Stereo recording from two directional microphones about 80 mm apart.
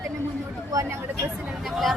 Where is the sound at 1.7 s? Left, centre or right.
Centre.